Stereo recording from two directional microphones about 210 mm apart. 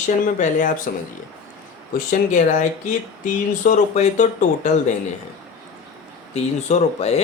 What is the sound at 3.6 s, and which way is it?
Speech, 35° left (ahead or behind).